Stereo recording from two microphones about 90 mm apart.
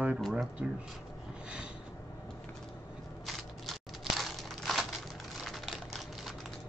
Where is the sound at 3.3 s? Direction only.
Centre (ahead or behind).